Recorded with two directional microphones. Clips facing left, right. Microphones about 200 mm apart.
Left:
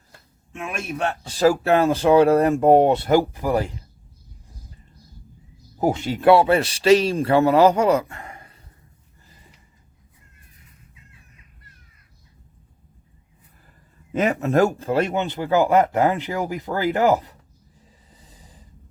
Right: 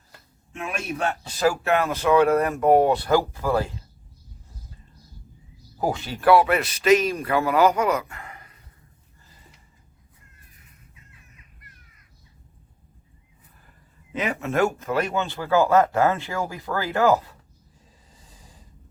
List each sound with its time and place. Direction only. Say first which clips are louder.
0.9 s speech: left 4 dB; 30° left (ahead or behind); by 3.7 s 15° left (ahead or behind)
5.7 s speech: left 5 dB; 20° left (ahead or behind)
14.1 s speech: left 6 dB; 45° left (ahead or behind); by 17.3 s 20° left (ahead or behind)